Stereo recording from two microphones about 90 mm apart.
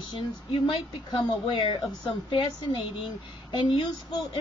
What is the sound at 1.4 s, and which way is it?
Speech, 65° left (ahead or behind).